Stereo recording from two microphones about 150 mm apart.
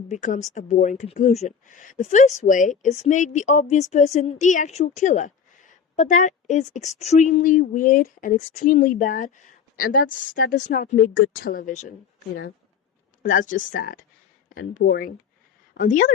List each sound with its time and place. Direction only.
0.1 s a woman's voice: 55° left (ahead or behind)
13.2 s a woman's voice: 60° left (ahead or behind)